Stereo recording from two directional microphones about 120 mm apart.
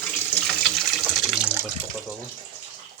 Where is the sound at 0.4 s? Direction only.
Centre (ahead or behind).